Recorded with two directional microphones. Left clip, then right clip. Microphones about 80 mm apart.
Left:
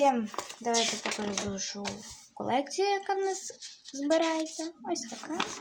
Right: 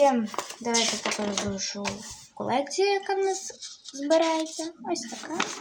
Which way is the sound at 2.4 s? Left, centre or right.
Left.